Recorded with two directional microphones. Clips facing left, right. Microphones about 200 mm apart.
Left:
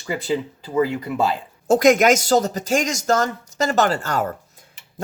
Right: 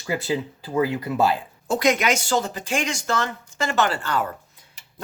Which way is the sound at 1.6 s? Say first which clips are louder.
Left 7 dB; 45° left (ahead or behind).